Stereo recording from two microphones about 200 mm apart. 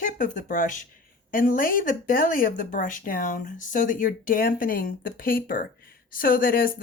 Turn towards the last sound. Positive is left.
turn(degrees=45)  # may be behind; listen again after turning